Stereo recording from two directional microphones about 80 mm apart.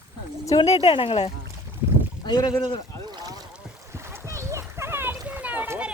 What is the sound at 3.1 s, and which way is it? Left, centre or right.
Boat, right.